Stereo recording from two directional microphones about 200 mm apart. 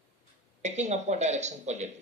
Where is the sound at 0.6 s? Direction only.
35° right (ahead or behind).